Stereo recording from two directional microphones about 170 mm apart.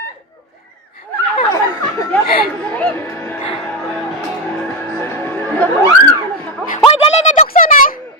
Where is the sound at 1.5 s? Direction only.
20° left (ahead or behind).